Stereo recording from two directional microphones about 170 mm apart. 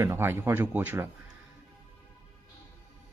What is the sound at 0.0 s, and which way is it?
A man's voice, 15° right (ahead or behind).